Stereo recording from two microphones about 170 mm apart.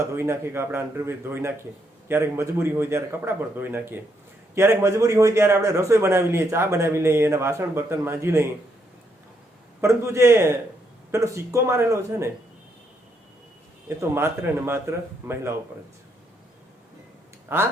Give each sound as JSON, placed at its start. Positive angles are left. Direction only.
{"t": 0.0, "sound": "a man's voice", "side_deg": -15}
{"t": 9.8, "sound": "a man's voice", "side_deg": -15}
{"t": 13.8, "sound": "a man's voice", "side_deg": -15}
{"t": 17.5, "sound": "a man's voice", "side_deg": -15}